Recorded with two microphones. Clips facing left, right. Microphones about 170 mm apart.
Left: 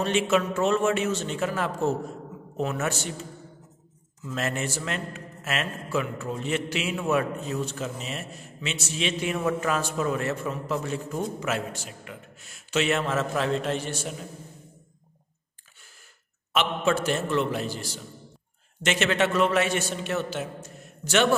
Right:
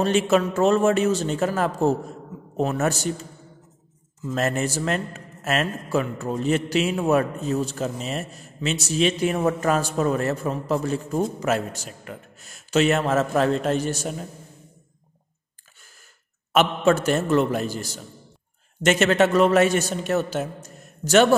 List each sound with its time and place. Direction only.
0.0 s a man's voice: 40° right (ahead or behind)
4.3 s a man's voice: 40° right (ahead or behind)
16.5 s a man's voice: 45° right (ahead or behind)